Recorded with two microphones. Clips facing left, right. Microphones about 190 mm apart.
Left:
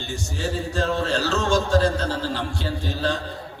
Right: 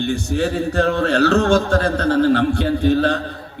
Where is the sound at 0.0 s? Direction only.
60° right (ahead or behind).